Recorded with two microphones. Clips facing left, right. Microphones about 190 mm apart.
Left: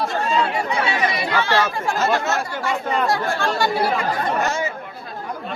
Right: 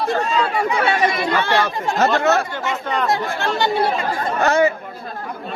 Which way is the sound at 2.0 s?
65° right (ahead or behind).